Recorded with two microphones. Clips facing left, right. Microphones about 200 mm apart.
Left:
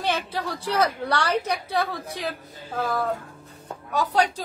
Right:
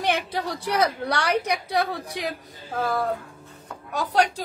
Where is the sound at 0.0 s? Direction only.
15° right (ahead or behind).